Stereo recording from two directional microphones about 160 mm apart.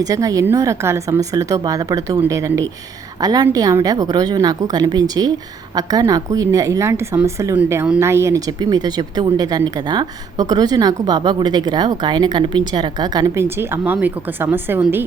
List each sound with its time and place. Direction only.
0.0 s a woman's voice: 20° right (ahead or behind)